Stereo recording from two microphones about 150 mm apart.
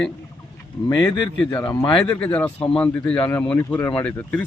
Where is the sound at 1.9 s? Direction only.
5° left (ahead or behind).